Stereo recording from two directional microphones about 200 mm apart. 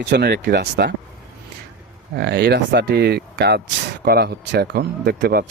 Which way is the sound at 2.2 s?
55° right (ahead or behind).